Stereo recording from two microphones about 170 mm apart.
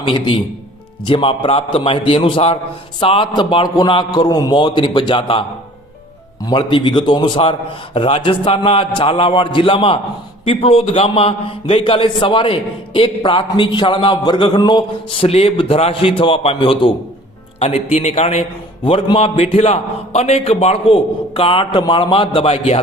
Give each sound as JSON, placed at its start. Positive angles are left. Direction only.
{"t": 0.0, "sound": "a man's voice", "side_deg": 30}